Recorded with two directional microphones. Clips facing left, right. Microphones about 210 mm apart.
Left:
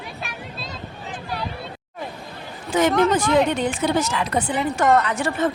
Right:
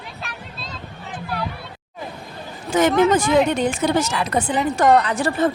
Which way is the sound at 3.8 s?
45° right (ahead or behind).